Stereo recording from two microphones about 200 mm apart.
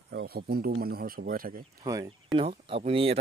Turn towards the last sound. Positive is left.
turn(degrees=-30)  # may be behind; listen again after turning